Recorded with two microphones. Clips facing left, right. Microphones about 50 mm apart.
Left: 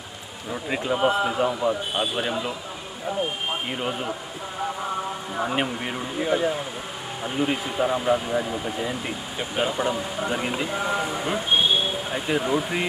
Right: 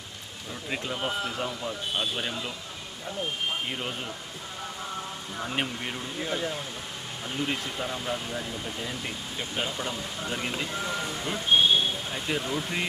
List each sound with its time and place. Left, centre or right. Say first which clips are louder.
0.7 s speech: left 9 dB; centre
3.7 s speech: left 6 dB; centre
5.4 s speech: left 6 dB; centre